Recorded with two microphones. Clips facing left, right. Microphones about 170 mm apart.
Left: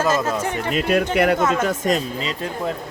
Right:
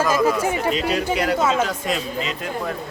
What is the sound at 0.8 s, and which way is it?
Speech, 55° left (ahead or behind).